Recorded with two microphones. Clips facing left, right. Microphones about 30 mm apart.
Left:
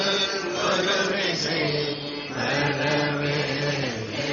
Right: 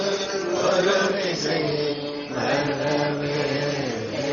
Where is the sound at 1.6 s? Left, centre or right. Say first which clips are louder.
Right 1 dB; left.